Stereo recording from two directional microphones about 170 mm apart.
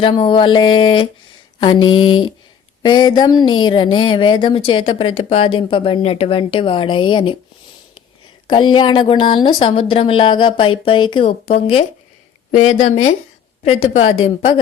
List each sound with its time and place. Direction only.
0.0 s a woman's voice: 30° left (ahead or behind)
8.4 s speech: 25° left (ahead or behind)
12.5 s speech: 50° left (ahead or behind)
13.7 s a woman's voice: 35° left (ahead or behind)